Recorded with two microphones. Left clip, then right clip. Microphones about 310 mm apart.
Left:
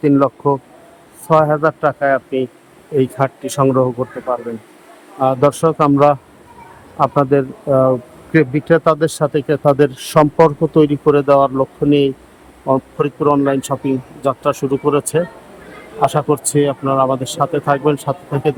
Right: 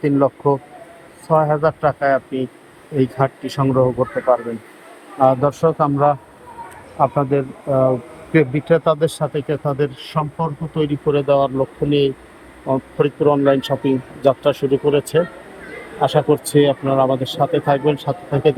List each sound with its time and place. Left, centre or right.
0.0 s a man's voice: centre